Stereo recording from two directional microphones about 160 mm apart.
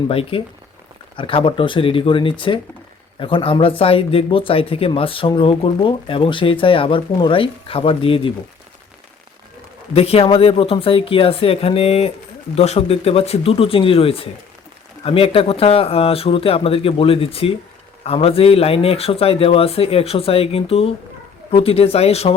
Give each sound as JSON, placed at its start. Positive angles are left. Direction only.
{"t": 0.1, "sound": "speech", "side_deg": 35}
{"t": 9.9, "sound": "speech", "side_deg": 40}